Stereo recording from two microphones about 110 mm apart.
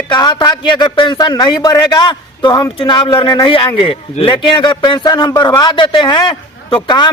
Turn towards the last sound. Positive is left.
turn(degrees=45)  # may be behind; listen again after turning